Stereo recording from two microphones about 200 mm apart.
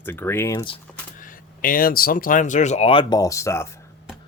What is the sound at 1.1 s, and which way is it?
Speech, 45° left (ahead or behind).